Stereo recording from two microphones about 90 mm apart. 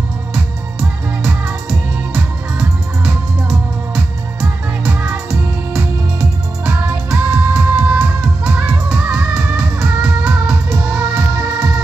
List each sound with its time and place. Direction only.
3.4 s music: 15° right (ahead or behind)
6.6 s music: 15° right (ahead or behind)
10.7 s music: 25° right (ahead or behind)